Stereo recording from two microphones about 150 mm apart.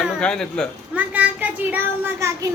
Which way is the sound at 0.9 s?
10° right (ahead or behind).